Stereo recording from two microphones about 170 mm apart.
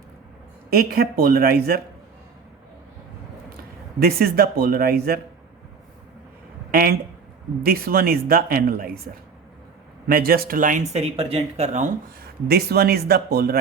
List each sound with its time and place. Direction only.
0.7 s speech: 65° right (ahead or behind)
4.0 s speech: 65° right (ahead or behind)
6.7 s speech: 60° right (ahead or behind)
10.1 s speech: 60° right (ahead or behind); by 11.9 s 40° right (ahead or behind)
12.5 s speech: 70° right (ahead or behind)